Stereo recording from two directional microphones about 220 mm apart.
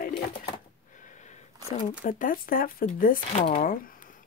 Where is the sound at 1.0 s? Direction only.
35° left (ahead or behind).